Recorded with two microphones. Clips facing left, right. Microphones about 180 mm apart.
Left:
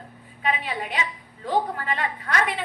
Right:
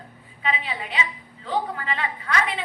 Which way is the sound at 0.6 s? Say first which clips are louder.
Left 1 dB; 50° left (ahead or behind).